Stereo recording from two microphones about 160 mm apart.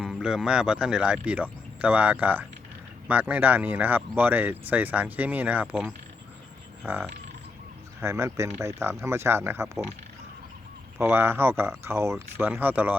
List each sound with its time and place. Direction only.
0.0 s speech: 5° right (ahead or behind)
11.0 s speech: 15° right (ahead or behind)